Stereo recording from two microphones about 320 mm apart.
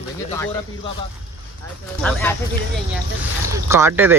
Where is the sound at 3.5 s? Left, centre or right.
Centre.